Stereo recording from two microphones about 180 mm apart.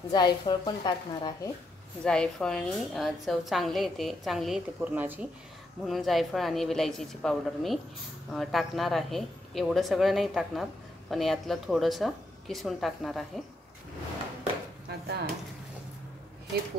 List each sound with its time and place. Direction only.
0.1 s a woman's voice: 25° left (ahead or behind)
2.0 s speech: 5° left (ahead or behind)
14.9 s a sound: 65° right (ahead or behind)